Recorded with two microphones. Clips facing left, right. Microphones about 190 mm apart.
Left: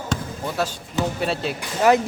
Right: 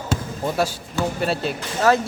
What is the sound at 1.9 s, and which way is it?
Speech, 15° left (ahead or behind).